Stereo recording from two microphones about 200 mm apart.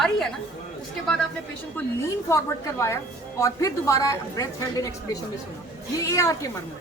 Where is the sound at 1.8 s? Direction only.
10° left (ahead or behind).